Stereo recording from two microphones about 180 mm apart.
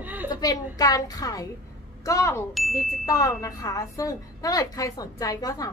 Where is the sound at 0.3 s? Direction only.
20° left (ahead or behind).